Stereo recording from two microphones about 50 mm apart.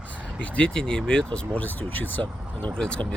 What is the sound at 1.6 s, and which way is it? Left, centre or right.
Speech, left.